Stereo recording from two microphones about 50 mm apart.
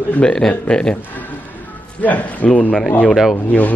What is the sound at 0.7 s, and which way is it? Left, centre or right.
Speech, centre.